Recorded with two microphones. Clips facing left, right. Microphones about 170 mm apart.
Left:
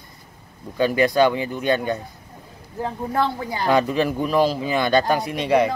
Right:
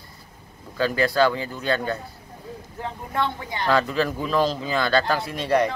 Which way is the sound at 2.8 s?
35° left (ahead or behind).